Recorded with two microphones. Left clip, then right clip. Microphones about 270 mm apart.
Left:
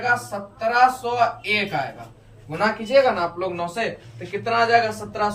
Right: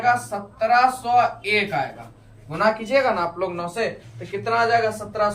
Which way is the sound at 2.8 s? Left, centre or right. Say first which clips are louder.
Left 2 dB; centre.